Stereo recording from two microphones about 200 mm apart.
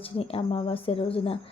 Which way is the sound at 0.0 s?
30° left (ahead or behind).